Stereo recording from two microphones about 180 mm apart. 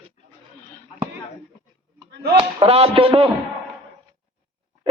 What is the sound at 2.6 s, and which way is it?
Speech, 35° right (ahead or behind).